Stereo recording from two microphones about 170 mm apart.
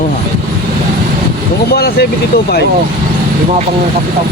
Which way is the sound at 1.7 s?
65° left (ahead or behind).